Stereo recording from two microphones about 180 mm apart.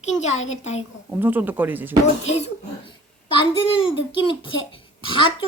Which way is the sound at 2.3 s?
35° left (ahead or behind).